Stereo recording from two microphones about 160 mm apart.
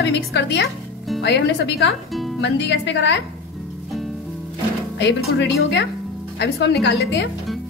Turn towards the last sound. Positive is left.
turn(degrees=90)